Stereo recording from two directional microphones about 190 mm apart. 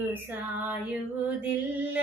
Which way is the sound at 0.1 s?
10° right (ahead or behind).